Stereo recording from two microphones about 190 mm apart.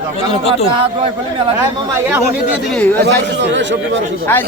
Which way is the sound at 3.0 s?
70° right (ahead or behind).